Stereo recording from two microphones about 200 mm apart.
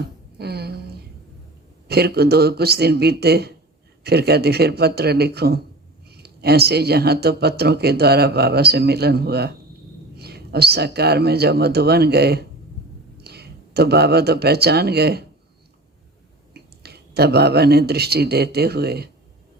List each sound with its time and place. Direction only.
0.0 s a sound: 55° right (ahead or behind)
1.9 s speech: 55° right (ahead or behind)
16.6 s speech: 55° right (ahead or behind)